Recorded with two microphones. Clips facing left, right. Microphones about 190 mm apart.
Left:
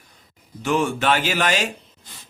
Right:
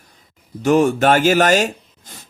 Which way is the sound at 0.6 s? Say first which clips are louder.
Right 7 dB; 40° right (ahead or behind).